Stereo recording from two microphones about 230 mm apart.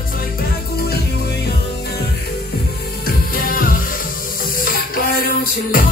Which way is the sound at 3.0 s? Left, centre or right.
Left.